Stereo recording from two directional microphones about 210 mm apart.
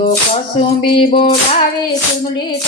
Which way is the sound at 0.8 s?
25° left (ahead or behind).